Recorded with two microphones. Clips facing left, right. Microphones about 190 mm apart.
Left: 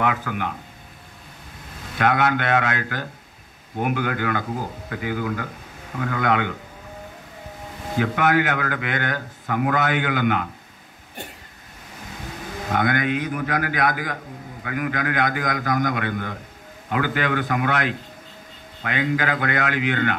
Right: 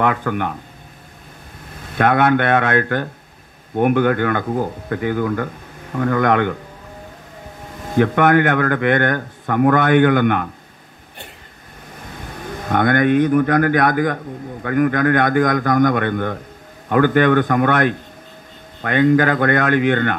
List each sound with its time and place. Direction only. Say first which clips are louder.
0.0 s speech: right 5 dB; 55° right (ahead or behind)
2.0 s speech: right 6 dB; 55° right (ahead or behind)
8.0 s speech: right 6 dB; 55° right (ahead or behind)
12.7 s speech: right 8 dB; 55° right (ahead or behind)